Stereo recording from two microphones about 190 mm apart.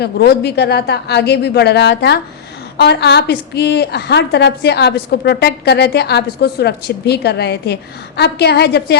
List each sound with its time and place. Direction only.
0.0 s a woman's voice: 60° left (ahead or behind)